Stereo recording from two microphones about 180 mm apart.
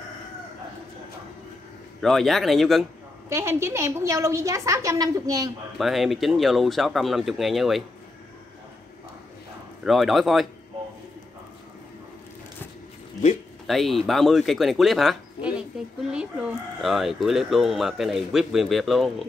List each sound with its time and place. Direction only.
2.0 s speech: centre (ahead or behind)
3.3 s a woman's voice: 15° right (ahead or behind)
5.8 s speech: centre (ahead or behind)
9.8 s speech: centre (ahead or behind)
13.7 s speech: centre (ahead or behind)